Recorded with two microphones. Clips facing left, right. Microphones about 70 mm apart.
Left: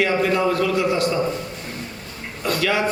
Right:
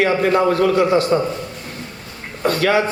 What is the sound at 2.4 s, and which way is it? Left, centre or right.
Speech, right.